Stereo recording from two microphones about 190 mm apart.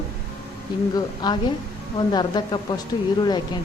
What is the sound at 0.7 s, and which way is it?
A woman's voice, 25° left (ahead or behind).